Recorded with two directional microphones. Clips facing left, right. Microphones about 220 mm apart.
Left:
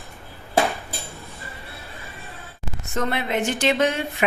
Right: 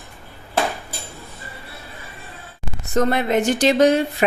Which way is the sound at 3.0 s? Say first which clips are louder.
Right 6 dB; 40° right (ahead or behind).